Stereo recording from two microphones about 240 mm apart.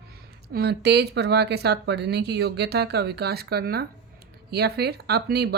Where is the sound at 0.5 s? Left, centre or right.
Right.